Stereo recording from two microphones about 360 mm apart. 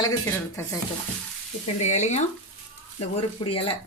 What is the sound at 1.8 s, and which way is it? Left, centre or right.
Speech, centre.